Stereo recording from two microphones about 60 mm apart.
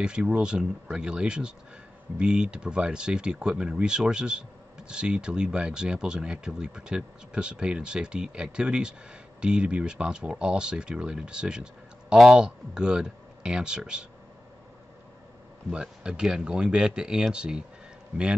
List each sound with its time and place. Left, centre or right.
0.0 s speech: centre
15.7 s speech: centre